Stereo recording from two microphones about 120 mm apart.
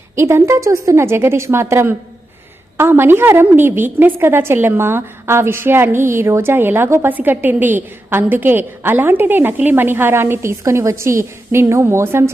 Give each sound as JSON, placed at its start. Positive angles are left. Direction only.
{"t": 0.2, "sound": "a woman's voice", "side_deg": -20}